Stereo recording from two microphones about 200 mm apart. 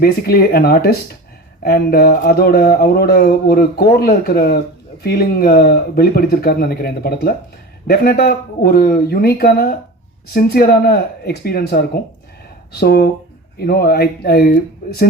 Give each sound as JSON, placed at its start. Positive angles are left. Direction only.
{"t": 0.0, "sound": "speech", "side_deg": 50}